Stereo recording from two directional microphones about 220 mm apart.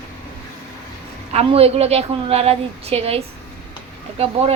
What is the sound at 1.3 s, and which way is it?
A woman's voice, 25° right (ahead or behind).